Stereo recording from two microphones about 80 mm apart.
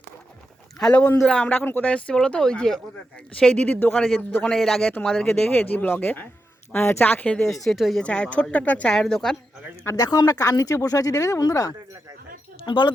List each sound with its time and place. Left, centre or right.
0.8 s speech: centre
5.5 s speech: left
7.0 s speech: left
7.6 s speech: centre
8.0 s speech: centre
9.0 s speech: centre
9.9 s speech: left
12.6 s speech: left